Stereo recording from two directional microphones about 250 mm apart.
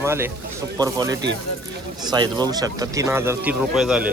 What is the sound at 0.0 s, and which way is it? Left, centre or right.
Speech, centre.